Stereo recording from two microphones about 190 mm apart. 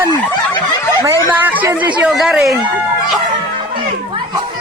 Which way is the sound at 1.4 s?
10° right (ahead or behind).